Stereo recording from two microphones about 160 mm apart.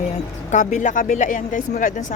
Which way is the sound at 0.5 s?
50° left (ahead or behind).